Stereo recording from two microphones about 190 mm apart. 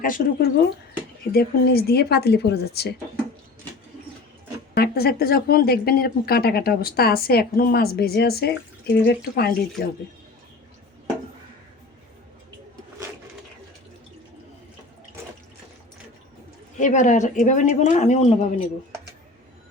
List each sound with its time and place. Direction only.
0.0 s speech: 50° left (ahead or behind)
4.7 s speech: 55° left (ahead or behind)
16.7 s speech: 40° left (ahead or behind)